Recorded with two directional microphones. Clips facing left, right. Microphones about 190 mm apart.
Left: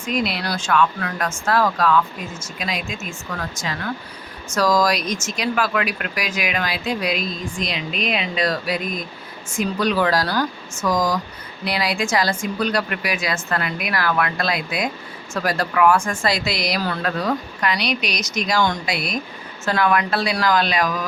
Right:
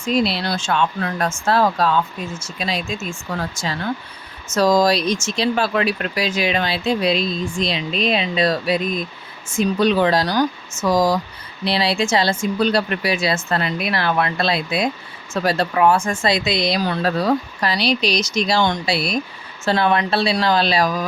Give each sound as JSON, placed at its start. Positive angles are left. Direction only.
{"t": 0.0, "sound": "speech", "side_deg": -30}